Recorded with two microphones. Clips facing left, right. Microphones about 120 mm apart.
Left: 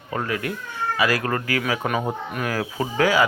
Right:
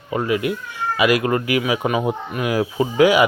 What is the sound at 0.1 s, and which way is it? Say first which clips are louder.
A man's voice: right 6 dB; 15° right (ahead or behind).